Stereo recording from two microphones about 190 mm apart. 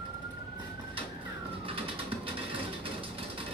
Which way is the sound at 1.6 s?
30° right (ahead or behind).